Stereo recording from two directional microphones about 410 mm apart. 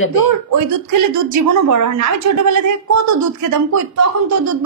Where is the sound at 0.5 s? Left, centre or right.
Right.